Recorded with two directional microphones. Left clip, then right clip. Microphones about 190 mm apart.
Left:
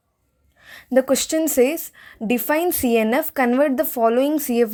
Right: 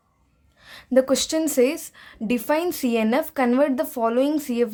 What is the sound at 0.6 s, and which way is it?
A woman's voice, 25° left (ahead or behind).